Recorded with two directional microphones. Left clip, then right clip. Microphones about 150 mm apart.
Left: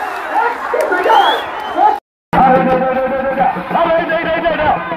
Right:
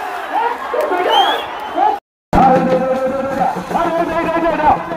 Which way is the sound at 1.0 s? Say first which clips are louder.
Left 3 dB; 5° right (ahead or behind).